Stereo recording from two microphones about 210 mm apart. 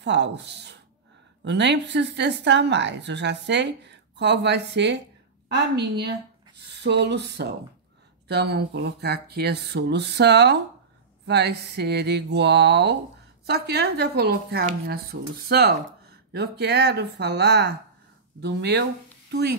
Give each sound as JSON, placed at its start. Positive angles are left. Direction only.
{"t": 0.0, "sound": "a woman's voice", "side_deg": -55}